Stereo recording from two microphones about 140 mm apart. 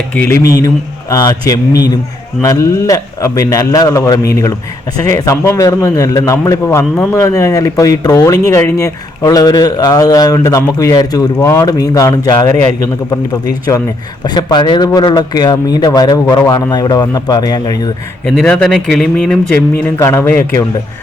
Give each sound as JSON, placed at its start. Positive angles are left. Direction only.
{"t": 0.1, "sound": "speech", "side_deg": 15}
{"t": 14.3, "sound": "speech", "side_deg": 30}
{"t": 18.3, "sound": "speech", "side_deg": 5}
{"t": 19.8, "sound": "a man's voice", "side_deg": 15}